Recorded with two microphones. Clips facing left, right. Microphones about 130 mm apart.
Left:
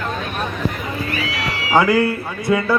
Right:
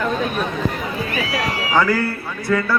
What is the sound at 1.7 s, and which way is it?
Speech, 15° left (ahead or behind).